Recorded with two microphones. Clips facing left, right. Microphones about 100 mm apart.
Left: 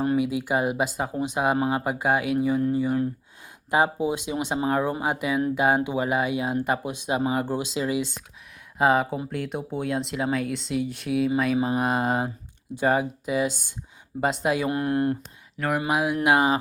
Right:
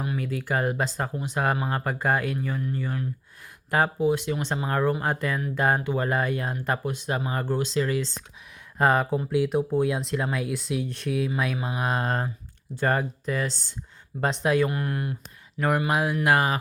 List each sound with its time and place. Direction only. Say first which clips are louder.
0.2 s speech: left 3 dB; 15° left (ahead or behind)
8.8 s speech: left 1 dB; 5° left (ahead or behind)
14.7 s speech: left 5 dB; 25° left (ahead or behind)
15.5 s speech: right 1 dB; centre (ahead or behind)
15.9 s speech: left 4 dB; 10° left (ahead or behind)